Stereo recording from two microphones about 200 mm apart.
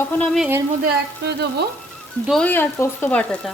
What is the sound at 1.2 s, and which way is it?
Frying, 55° right (ahead or behind).